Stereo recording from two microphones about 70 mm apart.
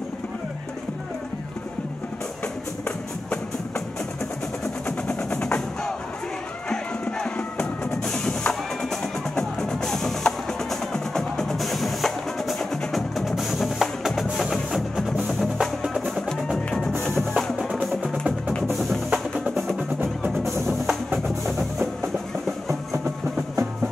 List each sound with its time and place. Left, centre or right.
4.8 s percussion: centre
6.7 s music: centre
15.6 s percussion: centre
16.2 s music: centre
18.7 s music: centre
20.2 s percussion: centre
21.5 s music: centre